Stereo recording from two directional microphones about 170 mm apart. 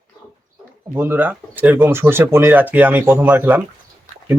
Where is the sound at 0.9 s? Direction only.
10° right (ahead or behind).